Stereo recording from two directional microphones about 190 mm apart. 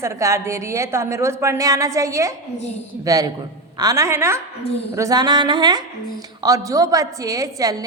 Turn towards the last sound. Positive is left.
turn(degrees=-20)  # may be behind; listen again after turning